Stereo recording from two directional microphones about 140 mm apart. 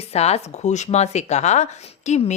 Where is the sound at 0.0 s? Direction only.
50° left (ahead or behind).